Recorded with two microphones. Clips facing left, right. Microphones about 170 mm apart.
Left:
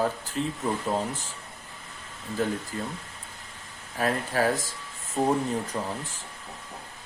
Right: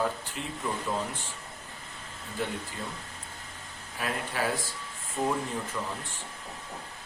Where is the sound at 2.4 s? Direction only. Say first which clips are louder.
Left 6 dB; 40° left (ahead or behind).